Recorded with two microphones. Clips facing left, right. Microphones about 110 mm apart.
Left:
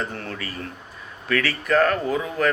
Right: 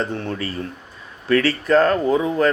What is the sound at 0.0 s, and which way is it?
Speech, 25° right (ahead or behind).